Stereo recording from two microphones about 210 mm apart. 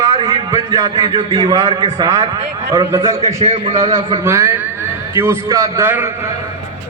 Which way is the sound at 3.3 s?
30° right (ahead or behind).